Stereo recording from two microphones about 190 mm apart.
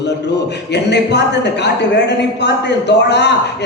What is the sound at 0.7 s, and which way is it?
Speech, 65° left (ahead or behind).